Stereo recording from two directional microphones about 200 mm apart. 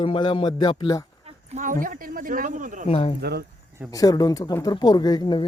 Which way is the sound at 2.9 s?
30° left (ahead or behind).